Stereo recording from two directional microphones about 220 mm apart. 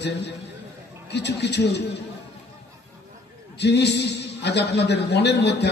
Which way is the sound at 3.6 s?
50° left (ahead or behind).